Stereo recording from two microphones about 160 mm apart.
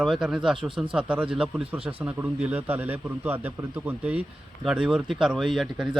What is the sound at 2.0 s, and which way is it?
A man's voice, 10° right (ahead or behind).